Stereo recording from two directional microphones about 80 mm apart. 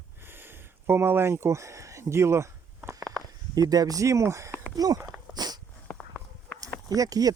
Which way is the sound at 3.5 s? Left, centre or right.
Right.